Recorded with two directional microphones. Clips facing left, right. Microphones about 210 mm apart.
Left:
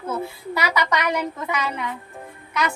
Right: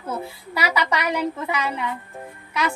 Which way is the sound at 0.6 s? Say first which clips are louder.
Even; 35° right (ahead or behind).